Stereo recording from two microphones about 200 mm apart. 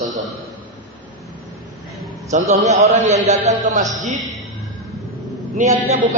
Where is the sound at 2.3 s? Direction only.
35° right (ahead or behind).